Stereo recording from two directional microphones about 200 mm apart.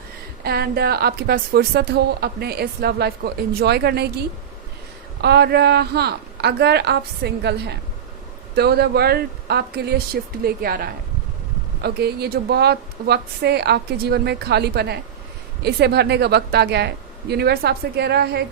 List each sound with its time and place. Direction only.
0.4 s a woman's voice: 50° right (ahead or behind)
5.2 s a woman's voice: 55° right (ahead or behind)